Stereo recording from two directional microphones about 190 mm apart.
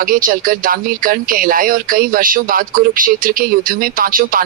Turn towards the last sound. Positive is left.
turn(degrees=-45)  # may be behind; listen again after turning